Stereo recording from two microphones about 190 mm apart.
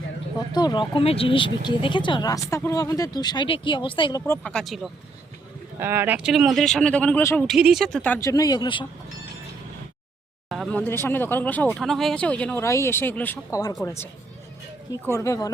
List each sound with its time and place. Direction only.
0.3 s speech: 20° left (ahead or behind)
4.3 s speech: 5° left (ahead or behind)
5.8 s speech: 10° right (ahead or behind); by 7.4 s 10° left (ahead or behind)
7.4 s speech: centre (ahead or behind); by 8.9 s 25° left (ahead or behind)
10.5 s speech: 5° left (ahead or behind)